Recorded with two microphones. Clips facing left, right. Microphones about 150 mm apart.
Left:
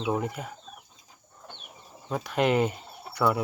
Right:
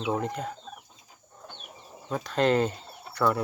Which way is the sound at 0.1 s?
10° left (ahead or behind).